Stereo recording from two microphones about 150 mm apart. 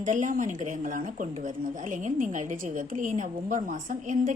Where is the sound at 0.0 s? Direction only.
60° right (ahead or behind).